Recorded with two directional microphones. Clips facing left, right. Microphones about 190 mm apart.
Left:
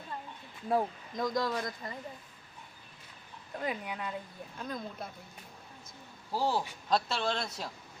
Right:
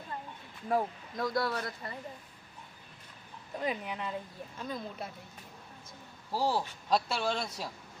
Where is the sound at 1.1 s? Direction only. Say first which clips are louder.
Even; 15° left (ahead or behind).